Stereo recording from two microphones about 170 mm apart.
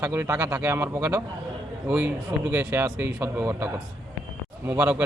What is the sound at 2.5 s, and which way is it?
A man's voice, 10° right (ahead or behind).